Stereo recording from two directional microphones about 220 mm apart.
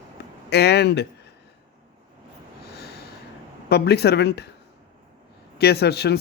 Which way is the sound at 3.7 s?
45° left (ahead or behind).